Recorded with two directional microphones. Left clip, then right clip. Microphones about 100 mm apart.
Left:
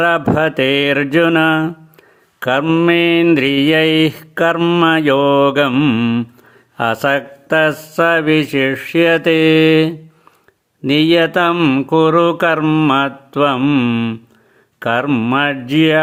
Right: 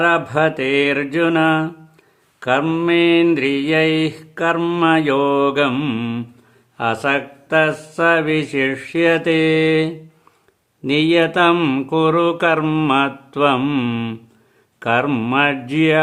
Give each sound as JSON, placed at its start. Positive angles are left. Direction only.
{"t": 0.0, "sound": "mantra", "side_deg": 50}
{"t": 4.5, "sound": "mantra", "side_deg": 35}
{"t": 6.7, "sound": "speech", "side_deg": 55}
{"t": 7.9, "sound": "mantra", "side_deg": 40}
{"t": 11.9, "sound": "mantra", "side_deg": 35}
{"t": 12.6, "sound": "mantra", "side_deg": 25}
{"t": 12.9, "sound": "mantra", "side_deg": 35}